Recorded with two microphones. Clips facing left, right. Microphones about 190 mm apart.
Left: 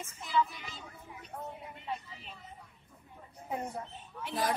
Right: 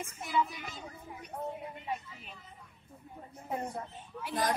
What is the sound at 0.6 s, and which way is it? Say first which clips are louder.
Speech: right 3 dB; 50° right (ahead or behind).